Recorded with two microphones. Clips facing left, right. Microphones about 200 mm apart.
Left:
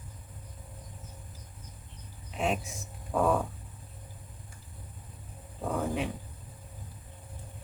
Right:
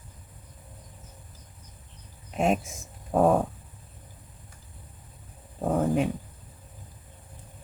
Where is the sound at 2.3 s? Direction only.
45° right (ahead or behind).